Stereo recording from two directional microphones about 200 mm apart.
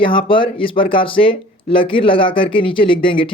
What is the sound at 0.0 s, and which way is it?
Speech, 25° left (ahead or behind).